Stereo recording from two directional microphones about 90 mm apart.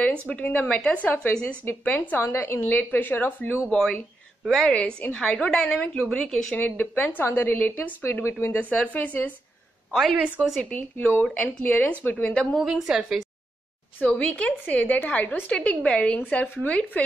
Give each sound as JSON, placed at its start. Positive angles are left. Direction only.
{"t": 0.3, "sound": "a woman's voice", "side_deg": 15}
{"t": 3.7, "sound": "a woman's voice", "side_deg": 5}
{"t": 10.1, "sound": "a woman's voice", "side_deg": -15}
{"t": 10.6, "sound": "a woman's voice", "side_deg": 15}
{"t": 11.2, "sound": "a woman's voice", "side_deg": 5}
{"t": 11.6, "sound": "a woman's voice", "side_deg": 15}
{"t": 12.5, "sound": "a woman's voice", "side_deg": -5}
{"t": 13.9, "sound": "a woman's voice", "side_deg": 15}